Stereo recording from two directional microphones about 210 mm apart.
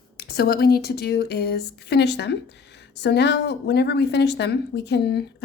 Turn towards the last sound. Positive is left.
turn(degrees=50)  # may be behind; listen again after turning